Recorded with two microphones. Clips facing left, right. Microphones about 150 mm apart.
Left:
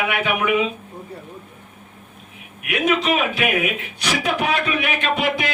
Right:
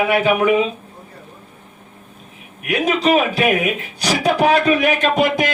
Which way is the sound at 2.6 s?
35° right (ahead or behind).